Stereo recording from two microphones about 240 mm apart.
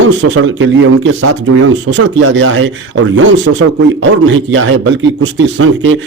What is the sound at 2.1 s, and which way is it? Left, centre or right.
Speech, right.